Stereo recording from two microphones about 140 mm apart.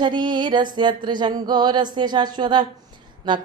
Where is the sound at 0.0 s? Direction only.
35° right (ahead or behind).